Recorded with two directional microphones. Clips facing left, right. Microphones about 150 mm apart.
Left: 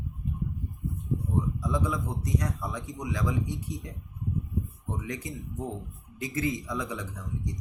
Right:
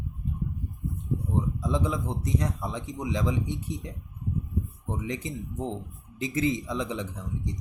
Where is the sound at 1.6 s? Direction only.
25° right (ahead or behind).